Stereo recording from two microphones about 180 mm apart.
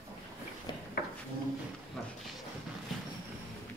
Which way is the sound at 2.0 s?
5° left (ahead or behind).